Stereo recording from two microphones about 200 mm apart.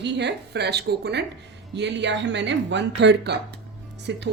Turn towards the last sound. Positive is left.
turn(degrees=-60)  # may be behind; listen again after turning